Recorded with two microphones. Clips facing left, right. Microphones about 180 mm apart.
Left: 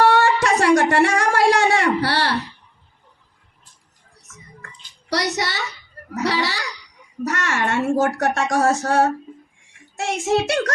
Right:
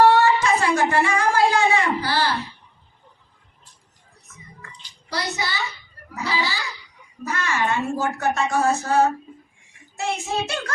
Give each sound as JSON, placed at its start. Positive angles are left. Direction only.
{"t": 0.0, "sound": "a sound", "side_deg": 75}
{"t": 2.0, "sound": "a child's voice", "side_deg": 75}
{"t": 5.0, "sound": "a child's voice", "side_deg": 80}